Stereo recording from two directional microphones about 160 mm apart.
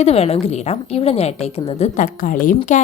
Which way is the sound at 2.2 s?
60° left (ahead or behind).